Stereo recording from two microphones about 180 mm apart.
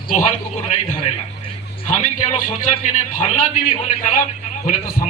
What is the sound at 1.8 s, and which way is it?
A man's voice, 45° left (ahead or behind).